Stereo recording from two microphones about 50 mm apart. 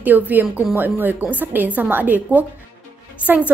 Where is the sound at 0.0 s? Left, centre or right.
Right.